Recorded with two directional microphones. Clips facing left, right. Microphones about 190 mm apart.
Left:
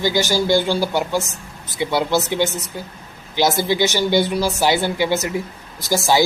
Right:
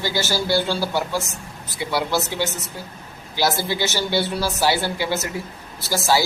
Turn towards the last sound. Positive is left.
turn(degrees=15)  # may be behind; listen again after turning